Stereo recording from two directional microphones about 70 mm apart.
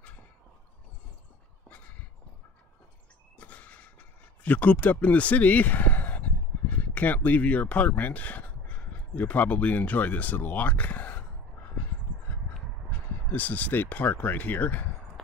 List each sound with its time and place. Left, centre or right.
3.3 s speech: left
13.3 s speech: left
15.2 s a sound: centre